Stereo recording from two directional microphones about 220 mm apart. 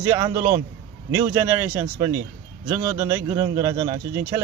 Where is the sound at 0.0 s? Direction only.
15° right (ahead or behind).